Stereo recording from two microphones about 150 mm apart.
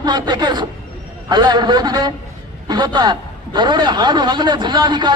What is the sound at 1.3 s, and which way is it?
A man's voice, 30° right (ahead or behind).